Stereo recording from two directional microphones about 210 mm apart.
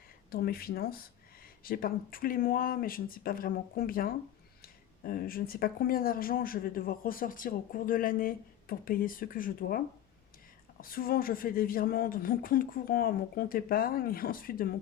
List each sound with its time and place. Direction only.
0.3 s speech: 45° left (ahead or behind)